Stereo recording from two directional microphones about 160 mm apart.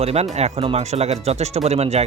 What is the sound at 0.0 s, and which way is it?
Speech, 40° right (ahead or behind).